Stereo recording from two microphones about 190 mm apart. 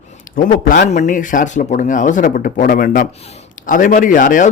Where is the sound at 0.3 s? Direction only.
45° left (ahead or behind).